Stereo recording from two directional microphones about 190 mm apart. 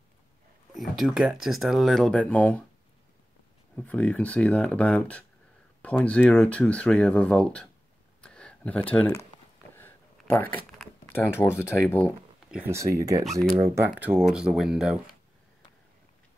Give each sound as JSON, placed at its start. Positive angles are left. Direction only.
{"t": 0.7, "sound": "speech", "side_deg": 0}
{"t": 3.7, "sound": "speech", "side_deg": 5}
{"t": 8.2, "sound": "a sound", "side_deg": 5}
{"t": 12.4, "sound": "speech", "side_deg": -10}
{"t": 13.2, "sound": "speech", "side_deg": 0}